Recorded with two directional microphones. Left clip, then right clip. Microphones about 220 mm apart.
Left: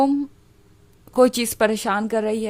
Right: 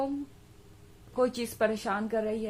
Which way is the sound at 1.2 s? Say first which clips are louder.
Left 11 dB; 50° left (ahead or behind).